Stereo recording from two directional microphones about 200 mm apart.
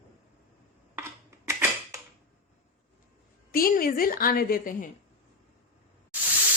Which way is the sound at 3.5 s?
45° left (ahead or behind).